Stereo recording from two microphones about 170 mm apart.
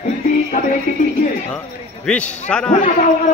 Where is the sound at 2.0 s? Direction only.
5° left (ahead or behind).